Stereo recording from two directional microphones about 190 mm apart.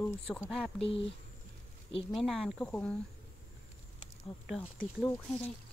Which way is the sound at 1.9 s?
30° left (ahead or behind).